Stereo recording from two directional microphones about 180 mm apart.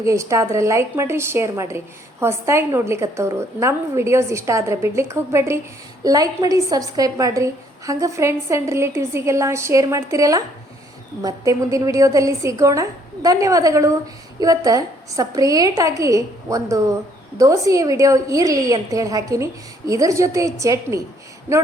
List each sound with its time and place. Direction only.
0.0 s a woman's voice: 15° right (ahead or behind)